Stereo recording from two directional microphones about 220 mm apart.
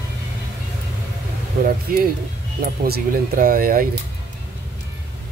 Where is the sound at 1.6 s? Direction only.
40° right (ahead or behind).